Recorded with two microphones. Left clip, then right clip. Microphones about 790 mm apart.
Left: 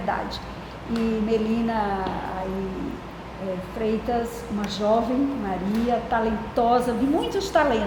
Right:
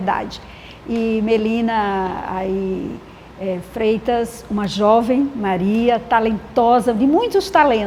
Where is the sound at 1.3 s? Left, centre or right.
Right.